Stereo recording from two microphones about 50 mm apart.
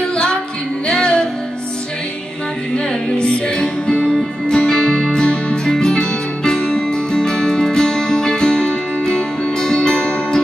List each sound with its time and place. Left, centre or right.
0.1 s music: centre
3.2 s music: left
4.0 s music: centre
4.5 s music: centre